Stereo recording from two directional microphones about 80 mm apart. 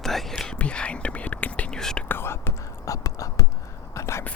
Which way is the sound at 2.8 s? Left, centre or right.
Left.